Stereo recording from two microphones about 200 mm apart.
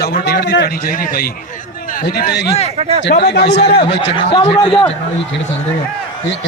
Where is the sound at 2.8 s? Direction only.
30° right (ahead or behind).